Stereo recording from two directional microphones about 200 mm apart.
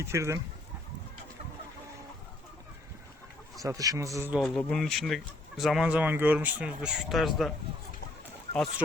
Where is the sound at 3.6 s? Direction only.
15° right (ahead or behind).